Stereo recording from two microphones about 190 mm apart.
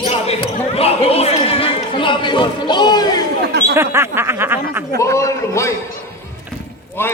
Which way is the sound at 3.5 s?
60° right (ahead or behind).